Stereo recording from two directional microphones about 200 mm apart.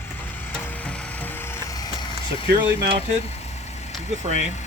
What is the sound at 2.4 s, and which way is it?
Speech, 55° right (ahead or behind).